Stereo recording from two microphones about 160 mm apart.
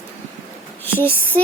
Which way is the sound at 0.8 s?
10° left (ahead or behind).